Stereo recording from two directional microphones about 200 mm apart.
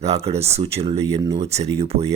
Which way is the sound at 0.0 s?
30° right (ahead or behind).